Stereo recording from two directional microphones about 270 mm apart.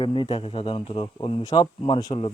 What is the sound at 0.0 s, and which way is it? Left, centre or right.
Speech, centre.